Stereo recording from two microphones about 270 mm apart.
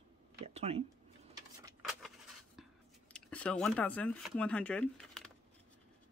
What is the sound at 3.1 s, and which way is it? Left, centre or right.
Speech, centre.